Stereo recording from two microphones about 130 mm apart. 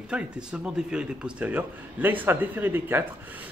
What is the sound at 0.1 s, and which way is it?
Speech, 5° right (ahead or behind).